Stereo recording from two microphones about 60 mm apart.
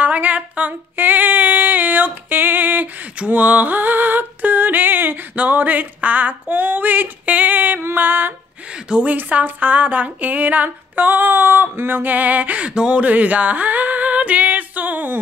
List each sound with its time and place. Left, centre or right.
0.0 s female singing: right
3.2 s a sound: right
9.0 s speech: right